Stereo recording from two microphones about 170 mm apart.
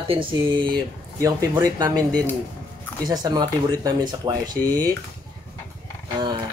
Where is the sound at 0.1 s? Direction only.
30° right (ahead or behind).